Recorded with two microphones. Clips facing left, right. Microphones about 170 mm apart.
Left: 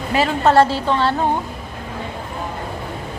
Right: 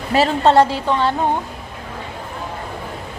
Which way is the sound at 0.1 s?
30° right (ahead or behind).